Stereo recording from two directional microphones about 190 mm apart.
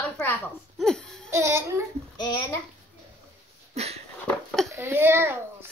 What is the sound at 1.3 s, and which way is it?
Speech, 15° right (ahead or behind).